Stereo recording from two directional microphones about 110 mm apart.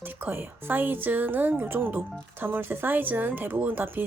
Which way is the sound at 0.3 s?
20° right (ahead or behind).